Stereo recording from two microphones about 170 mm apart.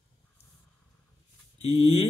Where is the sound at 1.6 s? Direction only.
40° left (ahead or behind).